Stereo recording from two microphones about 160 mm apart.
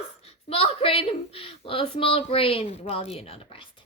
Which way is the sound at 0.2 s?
40° left (ahead or behind).